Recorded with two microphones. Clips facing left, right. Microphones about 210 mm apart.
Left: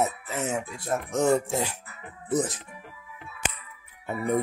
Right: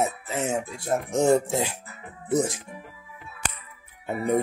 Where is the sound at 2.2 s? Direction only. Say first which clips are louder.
Right 2 dB; 10° right (ahead or behind).